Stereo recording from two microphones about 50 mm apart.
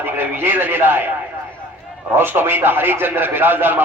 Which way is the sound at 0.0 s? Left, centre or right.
Right.